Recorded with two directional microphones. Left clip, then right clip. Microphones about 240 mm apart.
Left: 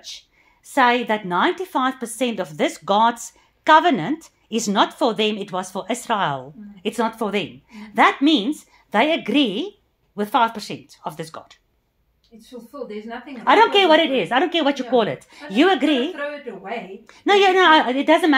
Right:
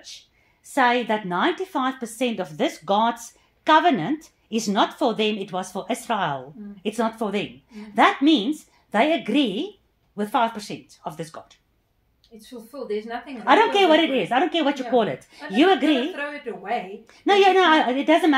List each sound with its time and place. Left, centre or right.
0.7 s a woman's voice: left
12.4 s speech: right
13.4 s a woman's voice: left